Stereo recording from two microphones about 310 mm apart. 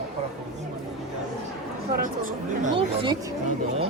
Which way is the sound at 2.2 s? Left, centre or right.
Right.